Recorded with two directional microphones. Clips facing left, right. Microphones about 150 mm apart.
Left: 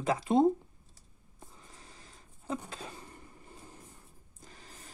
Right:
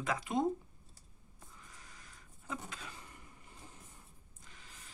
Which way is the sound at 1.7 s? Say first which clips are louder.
Left 3 dB; 30° left (ahead or behind).